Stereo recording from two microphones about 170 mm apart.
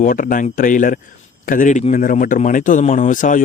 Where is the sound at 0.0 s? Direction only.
55° left (ahead or behind).